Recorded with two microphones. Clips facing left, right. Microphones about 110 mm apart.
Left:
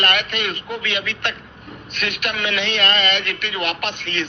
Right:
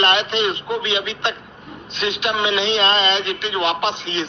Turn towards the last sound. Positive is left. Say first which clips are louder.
# right 5 dB
turn(degrees=-20)  # may be behind; listen again after turning